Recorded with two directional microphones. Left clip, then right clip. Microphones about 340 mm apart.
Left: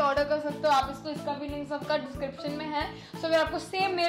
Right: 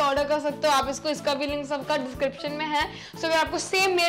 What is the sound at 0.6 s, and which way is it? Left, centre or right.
Speech, right.